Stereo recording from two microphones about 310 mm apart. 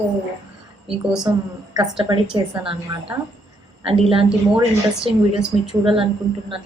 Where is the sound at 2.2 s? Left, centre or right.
Centre.